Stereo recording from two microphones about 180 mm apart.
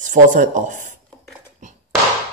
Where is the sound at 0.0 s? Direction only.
45° right (ahead or behind).